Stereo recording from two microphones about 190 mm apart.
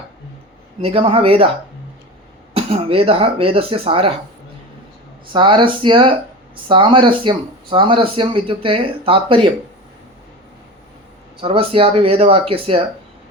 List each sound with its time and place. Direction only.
0.8 s speech: 30° right (ahead or behind)
2.5 s speech: 30° right (ahead or behind)
5.3 s speech: 25° right (ahead or behind)
11.3 s speech: 30° right (ahead or behind)